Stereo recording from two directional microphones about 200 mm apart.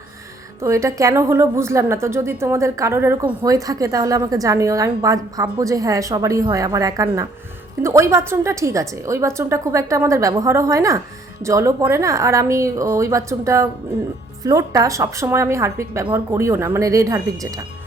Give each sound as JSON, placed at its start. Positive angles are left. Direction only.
{"t": 0.6, "sound": "a woman's voice", "side_deg": -15}